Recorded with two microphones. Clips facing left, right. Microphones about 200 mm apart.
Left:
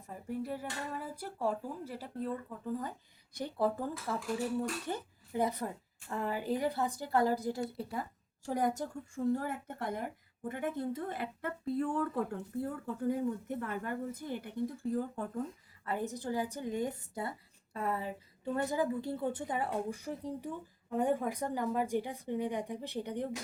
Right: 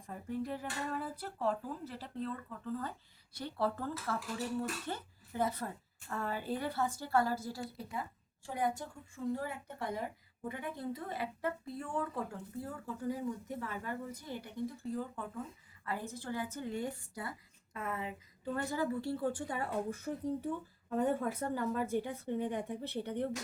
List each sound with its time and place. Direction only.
0.0 s a woman's voice: 5° left (ahead or behind)
3.3 s a woman's voice: 15° left (ahead or behind)
8.4 s a woman's voice: 40° left (ahead or behind)
15.9 s a woman's voice: 20° left (ahead or behind)
17.7 s a woman's voice: 35° left (ahead or behind); by 23.3 s 15° left (ahead or behind)